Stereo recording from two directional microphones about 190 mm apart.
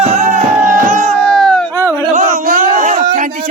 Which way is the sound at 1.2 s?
5° left (ahead or behind).